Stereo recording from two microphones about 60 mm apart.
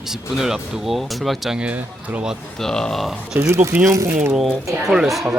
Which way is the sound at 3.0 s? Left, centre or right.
Centre.